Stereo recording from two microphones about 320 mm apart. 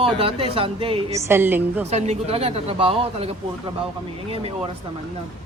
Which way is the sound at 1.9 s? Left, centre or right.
Centre.